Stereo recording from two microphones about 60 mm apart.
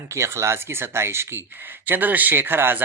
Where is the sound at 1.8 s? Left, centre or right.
Right.